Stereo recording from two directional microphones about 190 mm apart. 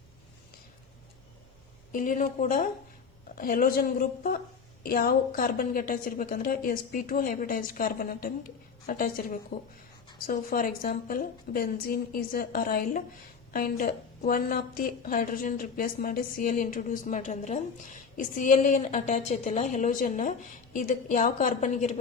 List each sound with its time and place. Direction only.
1.9 s a woman's voice: 45° left (ahead or behind)